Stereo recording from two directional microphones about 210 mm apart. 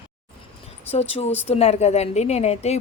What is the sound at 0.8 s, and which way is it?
A woman's voice, 30° left (ahead or behind).